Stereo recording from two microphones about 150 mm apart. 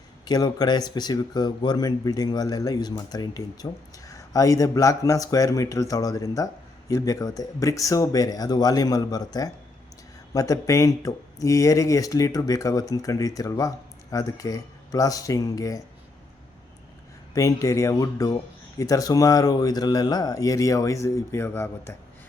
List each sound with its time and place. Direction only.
0.3 s speech: 25° left (ahead or behind)
17.3 s speech: 20° left (ahead or behind)